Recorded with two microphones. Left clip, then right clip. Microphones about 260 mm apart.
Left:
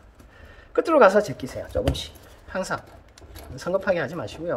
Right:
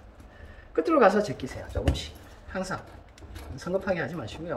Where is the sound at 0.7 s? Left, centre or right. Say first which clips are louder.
Left 5 dB; centre.